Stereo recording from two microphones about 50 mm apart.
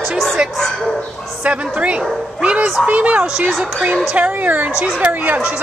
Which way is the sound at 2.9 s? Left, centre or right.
Right.